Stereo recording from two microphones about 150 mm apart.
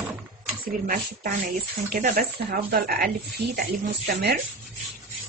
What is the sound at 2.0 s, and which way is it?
Speech, 75° right (ahead or behind).